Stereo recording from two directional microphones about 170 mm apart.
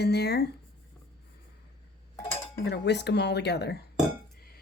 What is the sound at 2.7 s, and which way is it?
Speech, 90° left.